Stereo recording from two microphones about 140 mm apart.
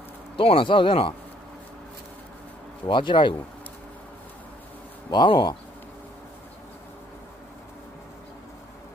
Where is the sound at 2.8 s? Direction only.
35° left (ahead or behind).